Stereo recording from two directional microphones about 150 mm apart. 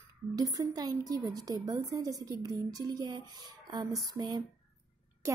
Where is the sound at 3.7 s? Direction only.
30° right (ahead or behind).